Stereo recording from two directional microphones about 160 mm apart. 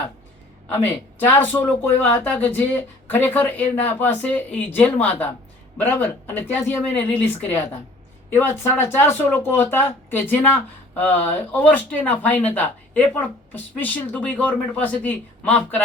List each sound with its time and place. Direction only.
0.7 s speech: 15° left (ahead or behind)